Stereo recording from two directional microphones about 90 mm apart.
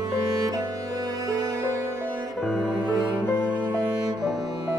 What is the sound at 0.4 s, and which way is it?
Music, 45° right (ahead or behind).